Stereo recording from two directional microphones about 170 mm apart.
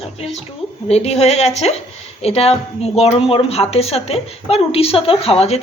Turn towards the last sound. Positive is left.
turn(degrees=35)  # may be behind; listen again after turning